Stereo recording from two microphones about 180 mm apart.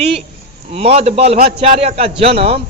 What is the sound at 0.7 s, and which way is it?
Speech, 35° right (ahead or behind).